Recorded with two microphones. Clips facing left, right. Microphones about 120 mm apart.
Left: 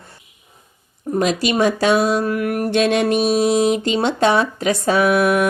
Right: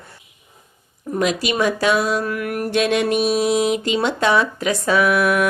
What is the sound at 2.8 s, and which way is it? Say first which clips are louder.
Mantra: left 1 dB; 35° left (ahead or behind).